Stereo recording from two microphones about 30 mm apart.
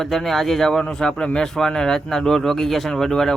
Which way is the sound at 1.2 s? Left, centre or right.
Left.